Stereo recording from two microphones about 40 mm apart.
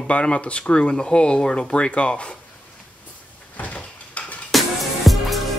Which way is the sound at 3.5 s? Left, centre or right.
Left.